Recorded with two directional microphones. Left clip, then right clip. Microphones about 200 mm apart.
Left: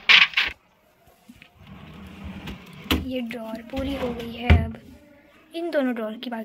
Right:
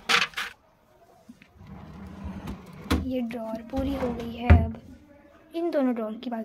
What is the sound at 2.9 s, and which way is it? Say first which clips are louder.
Speech: left 2 dB; 5° right (ahead or behind).